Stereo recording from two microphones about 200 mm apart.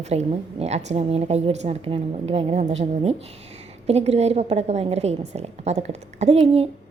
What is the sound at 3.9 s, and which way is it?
A woman's voice, 30° right (ahead or behind).